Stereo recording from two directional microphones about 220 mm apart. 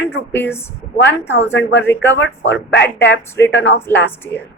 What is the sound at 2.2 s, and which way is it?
Speech, 55° left (ahead or behind).